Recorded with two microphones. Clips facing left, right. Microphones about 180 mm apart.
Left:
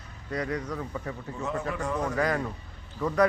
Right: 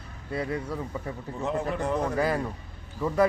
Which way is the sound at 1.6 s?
30° right (ahead or behind).